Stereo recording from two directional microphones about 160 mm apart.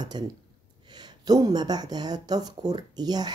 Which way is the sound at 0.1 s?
30° right (ahead or behind).